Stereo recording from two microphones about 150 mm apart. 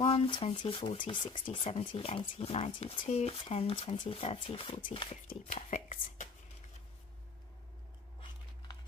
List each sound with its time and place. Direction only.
0.0 s speech: 40° left (ahead or behind)
5.5 s speech: 50° left (ahead or behind)